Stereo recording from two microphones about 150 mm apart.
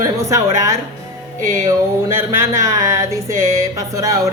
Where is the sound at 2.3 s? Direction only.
20° right (ahead or behind).